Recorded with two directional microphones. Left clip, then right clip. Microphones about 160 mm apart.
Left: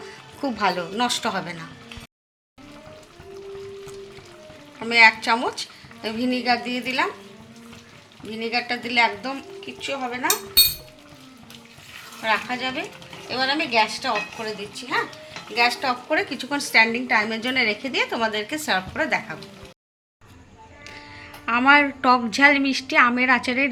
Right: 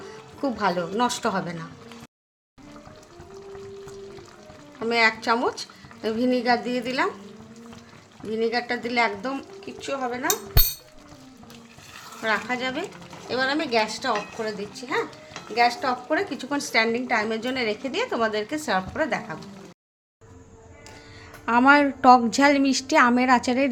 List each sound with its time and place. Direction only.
0.1 s music: 15° right (ahead or behind)
0.9 s a woman's voice: 35° right (ahead or behind)
4.8 s a woman's voice: 25° right (ahead or behind)
8.3 s a woman's voice: 35° right (ahead or behind)
9.8 s stir: 25° right (ahead or behind)
12.2 s a woman's voice: 35° right (ahead or behind)
15.5 s a woman's voice: 35° right (ahead or behind)
16.0 s a woman's voice: 20° right (ahead or behind)
21.4 s a woman's voice: 45° right (ahead or behind)